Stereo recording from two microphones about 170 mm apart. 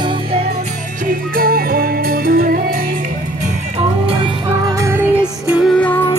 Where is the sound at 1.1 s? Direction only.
60° right (ahead or behind).